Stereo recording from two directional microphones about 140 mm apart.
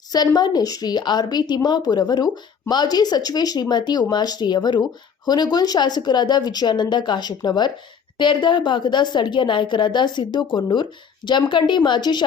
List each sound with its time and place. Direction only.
0.3 s a woman's voice: 30° left (ahead or behind)